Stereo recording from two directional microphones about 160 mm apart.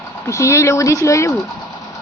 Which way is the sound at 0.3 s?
20° left (ahead or behind).